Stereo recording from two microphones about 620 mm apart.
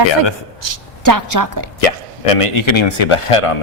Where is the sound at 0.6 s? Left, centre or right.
Right.